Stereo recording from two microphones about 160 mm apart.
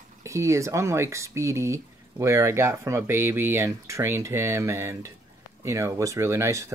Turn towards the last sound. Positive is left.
turn(degrees=-20)  # may be behind; listen again after turning